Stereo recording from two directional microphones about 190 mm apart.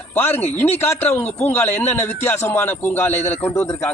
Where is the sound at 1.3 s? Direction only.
35° left (ahead or behind).